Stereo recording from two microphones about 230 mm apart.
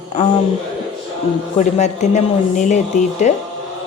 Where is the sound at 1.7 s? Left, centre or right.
Left.